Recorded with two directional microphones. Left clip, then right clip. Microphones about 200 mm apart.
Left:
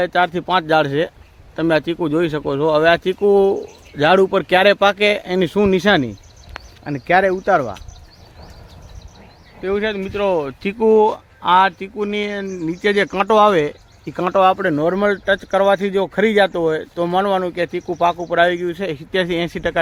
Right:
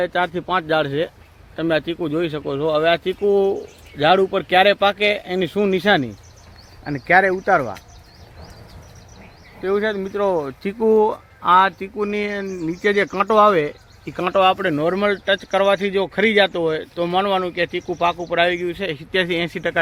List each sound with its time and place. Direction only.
0.0 s speech: 55° left (ahead or behind)
6.8 s speech: 50° left (ahead or behind)
9.6 s speech: 35° left (ahead or behind); by 19.8 s 50° left (ahead or behind)